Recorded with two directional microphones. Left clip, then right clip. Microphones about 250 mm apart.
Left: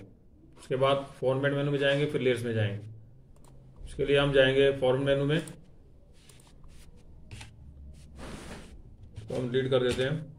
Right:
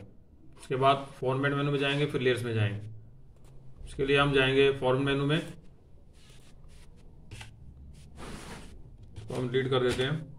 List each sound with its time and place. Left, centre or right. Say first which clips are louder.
0.7 s a man's voice: right 1 dB; centre
3.9 s a man's voice: left 1 dB; centre
9.5 s a man's voice: left 1 dB; centre